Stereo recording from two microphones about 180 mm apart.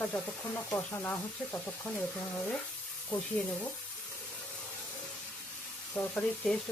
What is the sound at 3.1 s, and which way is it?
Speech, 5° left (ahead or behind).